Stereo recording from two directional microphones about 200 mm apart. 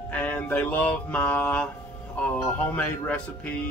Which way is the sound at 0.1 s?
10° left (ahead or behind).